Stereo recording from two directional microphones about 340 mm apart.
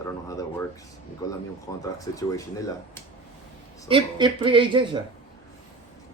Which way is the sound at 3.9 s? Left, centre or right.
Centre.